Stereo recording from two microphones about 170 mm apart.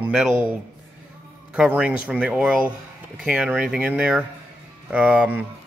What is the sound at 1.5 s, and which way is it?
Speech, 5° right (ahead or behind).